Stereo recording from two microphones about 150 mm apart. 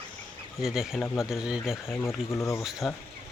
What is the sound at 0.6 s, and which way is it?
Speech, 5° right (ahead or behind).